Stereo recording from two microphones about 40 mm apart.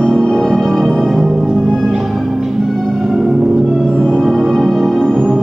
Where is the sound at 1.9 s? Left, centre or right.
Centre.